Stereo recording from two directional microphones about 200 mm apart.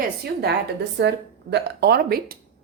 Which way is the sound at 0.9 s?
60° right (ahead or behind).